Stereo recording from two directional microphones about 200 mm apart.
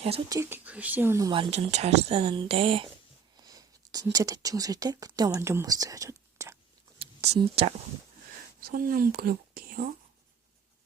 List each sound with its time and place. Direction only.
0.3 s speech: 15° right (ahead or behind)
3.3 s a sound: 20° right (ahead or behind)
4.1 s speech: 15° right (ahead or behind)
7.0 s speech: 30° right (ahead or behind)
8.6 s speech: 45° right (ahead or behind)